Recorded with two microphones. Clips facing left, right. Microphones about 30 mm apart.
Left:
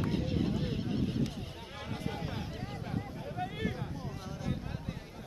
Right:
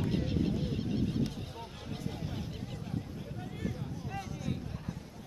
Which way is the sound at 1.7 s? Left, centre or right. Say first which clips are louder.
Left 4 dB; left.